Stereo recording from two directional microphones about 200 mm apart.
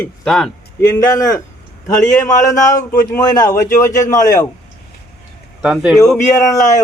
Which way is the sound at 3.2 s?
20° left (ahead or behind).